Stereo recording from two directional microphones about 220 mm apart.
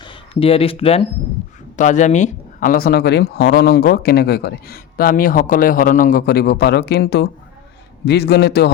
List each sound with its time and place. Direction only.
0.0 s speech: 25° left (ahead or behind); by 8.7 s 50° left (ahead or behind)